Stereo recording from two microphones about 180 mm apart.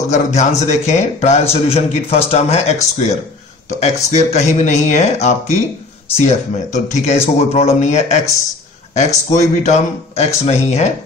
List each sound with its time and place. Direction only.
0.1 s a man's voice: 40° left (ahead or behind)